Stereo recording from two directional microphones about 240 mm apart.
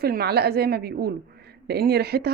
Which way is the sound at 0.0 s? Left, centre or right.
Right.